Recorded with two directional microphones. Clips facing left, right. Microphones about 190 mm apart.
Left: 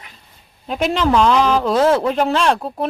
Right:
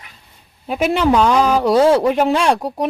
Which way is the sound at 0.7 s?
5° right (ahead or behind).